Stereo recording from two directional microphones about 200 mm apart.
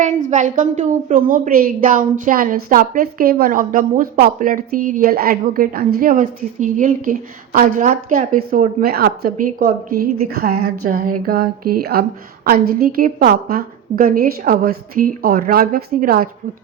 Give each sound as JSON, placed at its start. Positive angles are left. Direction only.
{"t": 0.0, "sound": "a woman's voice", "side_deg": -40}
{"t": 10.5, "sound": "a sound", "side_deg": -90}
{"t": 10.8, "sound": "speech", "side_deg": -45}